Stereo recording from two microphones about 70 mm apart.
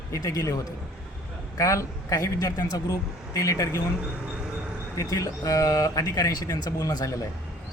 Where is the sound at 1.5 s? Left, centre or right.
Left.